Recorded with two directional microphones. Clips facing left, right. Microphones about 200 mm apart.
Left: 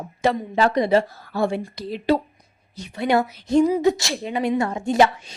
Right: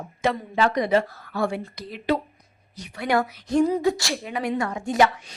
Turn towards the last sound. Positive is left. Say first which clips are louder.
# left 3 dB
turn(degrees=25)  # may be behind; listen again after turning